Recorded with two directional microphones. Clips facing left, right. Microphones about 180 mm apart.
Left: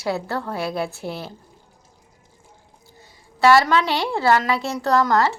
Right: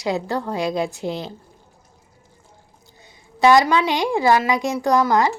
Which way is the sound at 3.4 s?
15° right (ahead or behind).